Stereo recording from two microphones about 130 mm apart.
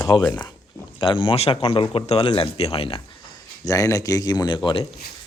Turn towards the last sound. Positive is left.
turn(degrees=30)  # may be behind; listen again after turning